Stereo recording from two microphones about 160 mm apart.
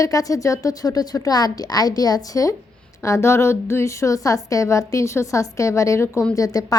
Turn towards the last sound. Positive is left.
turn(degrees=20)  # may be behind; listen again after turning